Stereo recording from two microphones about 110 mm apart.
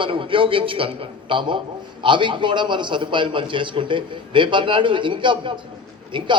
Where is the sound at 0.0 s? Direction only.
50° right (ahead or behind).